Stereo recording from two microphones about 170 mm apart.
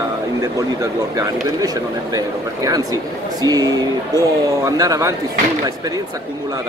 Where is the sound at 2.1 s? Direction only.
20° right (ahead or behind).